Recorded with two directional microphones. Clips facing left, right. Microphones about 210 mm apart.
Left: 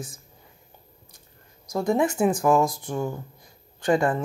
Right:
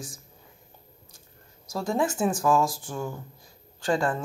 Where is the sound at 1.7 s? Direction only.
20° left (ahead or behind).